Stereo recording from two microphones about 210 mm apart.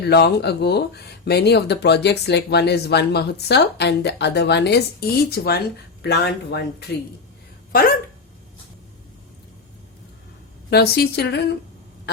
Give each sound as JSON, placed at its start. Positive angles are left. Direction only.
{"t": 0.0, "sound": "speech", "side_deg": 50}
{"t": 10.7, "sound": "speech", "side_deg": 50}